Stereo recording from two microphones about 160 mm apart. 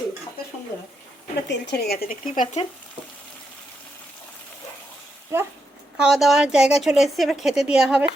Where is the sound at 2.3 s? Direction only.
55° left (ahead or behind).